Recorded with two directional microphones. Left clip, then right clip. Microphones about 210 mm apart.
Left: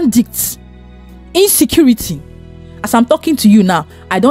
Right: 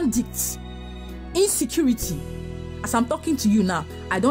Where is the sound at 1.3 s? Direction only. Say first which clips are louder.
Left 11 dB; 35° left (ahead or behind).